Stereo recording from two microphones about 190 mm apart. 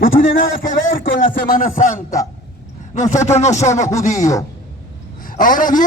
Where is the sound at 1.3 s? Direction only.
45° left (ahead or behind).